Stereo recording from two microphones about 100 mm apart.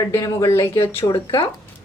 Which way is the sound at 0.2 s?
35° left (ahead or behind).